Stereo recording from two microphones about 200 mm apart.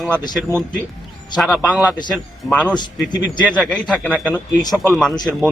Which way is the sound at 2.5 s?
5° left (ahead or behind).